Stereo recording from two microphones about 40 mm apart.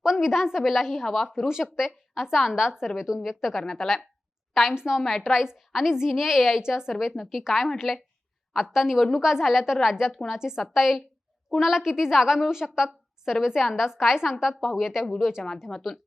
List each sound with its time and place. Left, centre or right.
0.0 s a woman's voice: centre
1.7 s a woman's voice: centre
3.5 s a woman's voice: centre
4.7 s a woman's voice: centre
4.9 s a woman's voice: centre
15.7 s a woman's voice: centre